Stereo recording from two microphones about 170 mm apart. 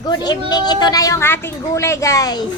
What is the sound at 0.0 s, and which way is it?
Speech, 25° left (ahead or behind).